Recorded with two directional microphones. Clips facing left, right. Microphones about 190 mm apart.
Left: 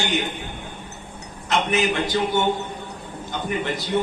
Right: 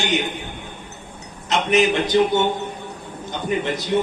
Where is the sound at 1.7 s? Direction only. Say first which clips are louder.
Right 8 dB; 20° right (ahead or behind).